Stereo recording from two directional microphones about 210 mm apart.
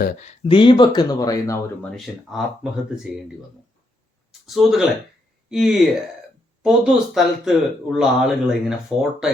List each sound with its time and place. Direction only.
0.0 s speech: 35° left (ahead or behind); by 1.9 s 15° left (ahead or behind)
2.1 s speech: 5° left (ahead or behind)
4.3 s a sound: centre (ahead or behind)
5.5 s speech: centre (ahead or behind)